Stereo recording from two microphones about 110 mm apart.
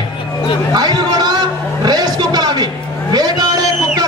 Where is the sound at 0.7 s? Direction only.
40° right (ahead or behind).